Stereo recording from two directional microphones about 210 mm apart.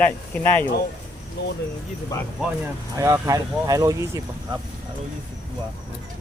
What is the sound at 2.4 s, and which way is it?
Speech, centre (ahead or behind).